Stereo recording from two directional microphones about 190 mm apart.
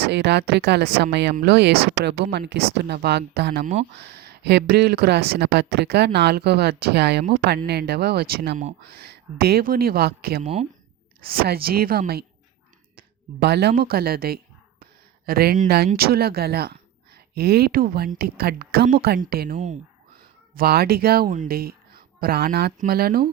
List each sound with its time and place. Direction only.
0.0 s speech: 65° right (ahead or behind)
3.6 s speech: 35° right (ahead or behind)
4.0 s a sound: 55° right (ahead or behind)
4.7 s speech: 55° right (ahead or behind)
10.4 s speech: 35° right (ahead or behind)
11.3 s speech: 55° right (ahead or behind)
19.5 s speech: 40° right (ahead or behind)
20.1 s speech: 55° right (ahead or behind)